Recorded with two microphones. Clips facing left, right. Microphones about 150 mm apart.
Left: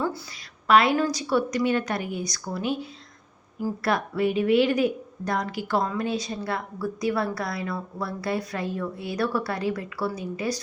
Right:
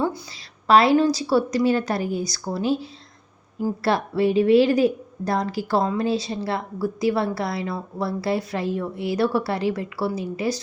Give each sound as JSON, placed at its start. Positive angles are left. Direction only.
{"t": 0.7, "sound": "a woman's voice", "side_deg": -30}